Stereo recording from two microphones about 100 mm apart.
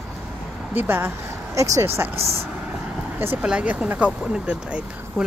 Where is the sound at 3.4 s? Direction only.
10° right (ahead or behind).